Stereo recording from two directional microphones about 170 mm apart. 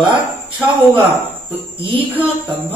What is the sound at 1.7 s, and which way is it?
Music, 30° right (ahead or behind).